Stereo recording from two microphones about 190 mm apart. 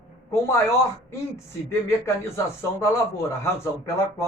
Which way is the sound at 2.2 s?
15° left (ahead or behind).